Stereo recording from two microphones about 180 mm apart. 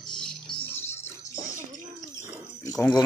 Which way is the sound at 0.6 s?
10° left (ahead or behind).